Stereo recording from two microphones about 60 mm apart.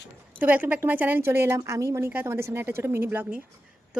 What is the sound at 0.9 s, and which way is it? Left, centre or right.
Speech, right.